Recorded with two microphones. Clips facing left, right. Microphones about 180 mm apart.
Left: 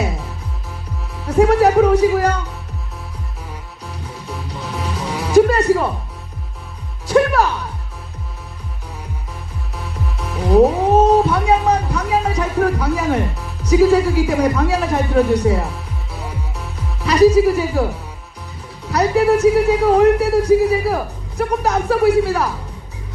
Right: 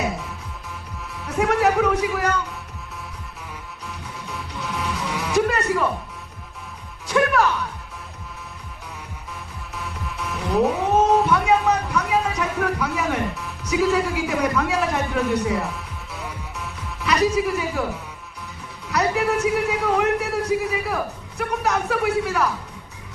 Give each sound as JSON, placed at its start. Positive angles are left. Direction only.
{"t": 1.2, "sound": "music", "side_deg": 35}
{"t": 4.3, "sound": "music", "side_deg": 35}
{"t": 9.7, "sound": "music", "side_deg": 35}
{"t": 18.9, "sound": "a man's voice", "side_deg": 35}